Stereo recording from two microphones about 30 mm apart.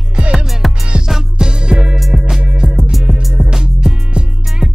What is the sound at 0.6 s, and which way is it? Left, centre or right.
Music, centre.